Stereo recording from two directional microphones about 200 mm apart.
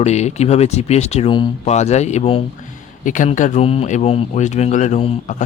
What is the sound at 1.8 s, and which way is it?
Speech, 35° left (ahead or behind).